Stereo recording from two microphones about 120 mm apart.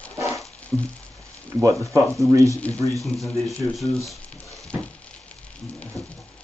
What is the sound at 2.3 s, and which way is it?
Speech, 25° right (ahead or behind).